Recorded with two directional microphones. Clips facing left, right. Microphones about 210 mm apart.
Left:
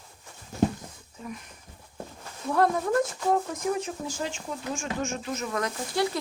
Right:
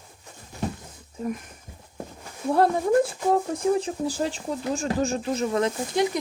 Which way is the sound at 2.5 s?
30° right (ahead or behind).